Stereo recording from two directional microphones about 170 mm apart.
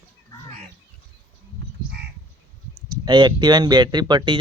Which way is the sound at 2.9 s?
25° right (ahead or behind).